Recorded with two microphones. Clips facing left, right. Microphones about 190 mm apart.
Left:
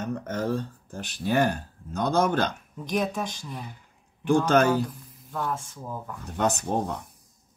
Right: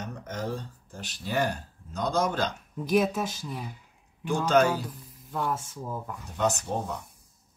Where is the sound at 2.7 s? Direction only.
5° right (ahead or behind).